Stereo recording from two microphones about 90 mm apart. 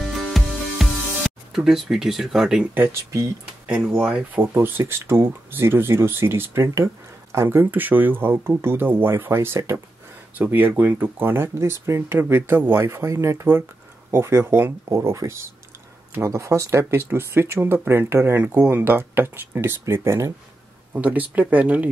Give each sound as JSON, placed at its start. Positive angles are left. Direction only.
{"t": 0.0, "sound": "music", "side_deg": 0}
{"t": 2.7, "sound": "speech", "side_deg": -30}
{"t": 3.6, "sound": "speech", "side_deg": -15}
{"t": 4.6, "sound": "speech", "side_deg": -25}
{"t": 20.9, "sound": "speech", "side_deg": -20}